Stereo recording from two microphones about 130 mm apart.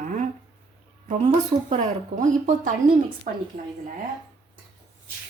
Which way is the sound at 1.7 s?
70° right (ahead or behind).